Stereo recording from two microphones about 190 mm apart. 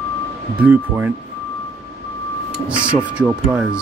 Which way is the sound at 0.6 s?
10° right (ahead or behind).